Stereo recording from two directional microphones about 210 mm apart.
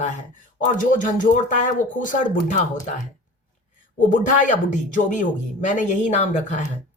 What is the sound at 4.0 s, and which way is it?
Speech, 35° left (ahead or behind).